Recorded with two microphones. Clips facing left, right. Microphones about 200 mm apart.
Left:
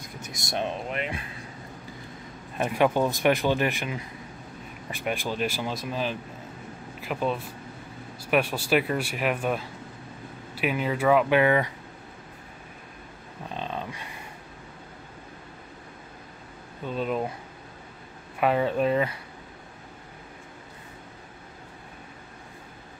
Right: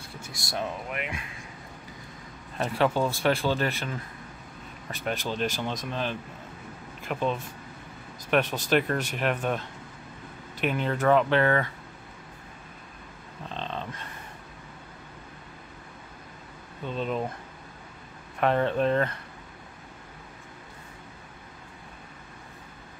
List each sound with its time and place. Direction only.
0.0 s speech: 20° left (ahead or behind)
2.5 s speech: 15° left (ahead or behind)
13.5 s a sound: 10° left (ahead or behind)
16.8 s speech: 5° left (ahead or behind)
18.4 s speech: 5° left (ahead or behind)